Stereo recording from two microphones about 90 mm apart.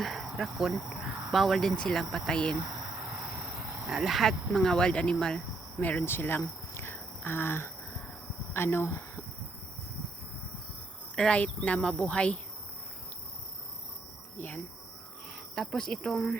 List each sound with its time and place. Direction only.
0.0 s speech: centre (ahead or behind)
3.2 s cricket: 5° right (ahead or behind)
3.8 s speech: 5° right (ahead or behind); by 7.0 s 25° left (ahead or behind)
7.2 s a sound: 25° left (ahead or behind)
8.5 s speech: 25° left (ahead or behind)
11.1 s speech: 10° left (ahead or behind)
14.3 s a sound: 20° left (ahead or behind)
15.5 s speech: 5° left (ahead or behind)